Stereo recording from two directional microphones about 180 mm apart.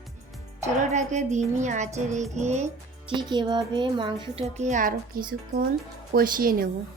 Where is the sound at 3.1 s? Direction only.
25° right (ahead or behind).